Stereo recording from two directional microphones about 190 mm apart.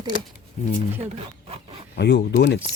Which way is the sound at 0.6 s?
40° left (ahead or behind).